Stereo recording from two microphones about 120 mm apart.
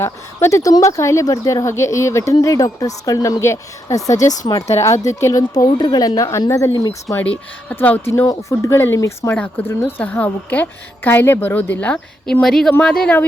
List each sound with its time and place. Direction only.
0.0 s a woman's voice: 25° left (ahead or behind)
7.2 s a woman's voice: 15° left (ahead or behind)